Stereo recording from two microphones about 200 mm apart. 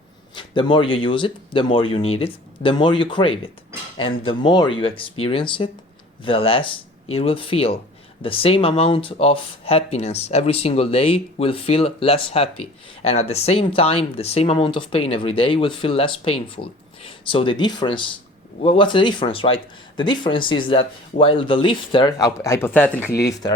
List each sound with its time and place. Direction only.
0.3 s speech: 25° left (ahead or behind); by 23.1 s 10° left (ahead or behind)